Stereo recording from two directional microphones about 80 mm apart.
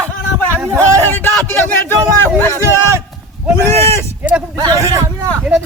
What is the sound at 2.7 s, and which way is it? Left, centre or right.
Speech, right.